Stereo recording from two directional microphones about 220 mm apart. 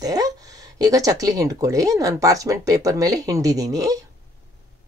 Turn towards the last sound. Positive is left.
turn(degrees=-15)  # may be behind; listen again after turning